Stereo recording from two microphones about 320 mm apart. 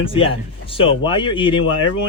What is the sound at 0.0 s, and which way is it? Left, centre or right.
Speech, centre.